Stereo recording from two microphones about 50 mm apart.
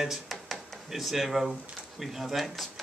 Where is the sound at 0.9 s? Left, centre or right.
Centre.